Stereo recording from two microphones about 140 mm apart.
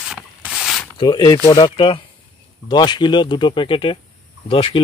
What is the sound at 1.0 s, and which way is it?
Speech, 35° left (ahead or behind).